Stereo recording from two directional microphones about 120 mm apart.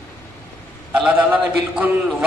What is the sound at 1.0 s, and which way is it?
A man's voice, 10° right (ahead or behind).